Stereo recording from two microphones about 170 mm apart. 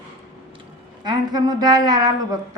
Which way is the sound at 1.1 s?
25° right (ahead or behind).